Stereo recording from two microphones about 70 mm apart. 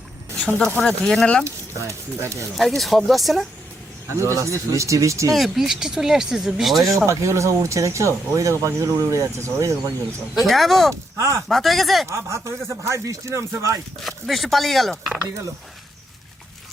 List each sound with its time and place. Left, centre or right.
0.3 s speech: centre
1.5 s speech: right
2.6 s speech: centre
4.2 s speech: right
5.3 s speech: centre
6.8 s speech: right
10.4 s speech: centre
11.2 s speech: right
11.4 s speech: centre
12.0 s speech: right
14.0 s speech: centre